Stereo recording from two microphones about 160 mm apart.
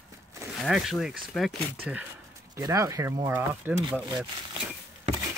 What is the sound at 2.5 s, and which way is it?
Speech, 20° right (ahead or behind).